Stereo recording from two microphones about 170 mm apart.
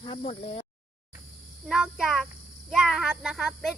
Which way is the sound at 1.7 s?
5° right (ahead or behind).